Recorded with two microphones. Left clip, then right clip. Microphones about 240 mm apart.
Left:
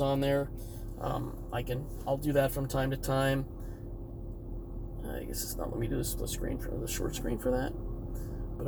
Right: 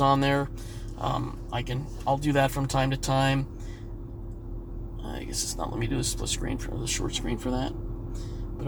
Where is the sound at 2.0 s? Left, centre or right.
Right.